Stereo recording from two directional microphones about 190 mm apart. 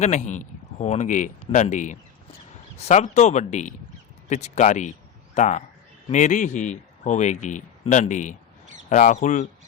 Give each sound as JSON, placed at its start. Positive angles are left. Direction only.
{"t": 0.0, "sound": "speech", "side_deg": 40}